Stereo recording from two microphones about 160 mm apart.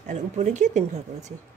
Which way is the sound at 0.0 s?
50° right (ahead or behind).